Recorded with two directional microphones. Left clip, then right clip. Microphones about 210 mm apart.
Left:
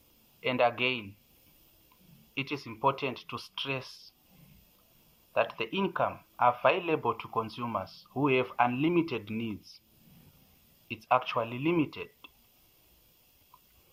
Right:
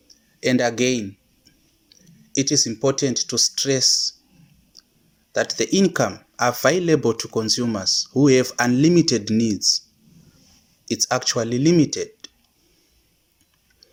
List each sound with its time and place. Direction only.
0.3 s speech: 35° right (ahead or behind)
2.3 s speech: 30° right (ahead or behind)
5.3 s speech: 35° right (ahead or behind)
10.8 s speech: 35° right (ahead or behind)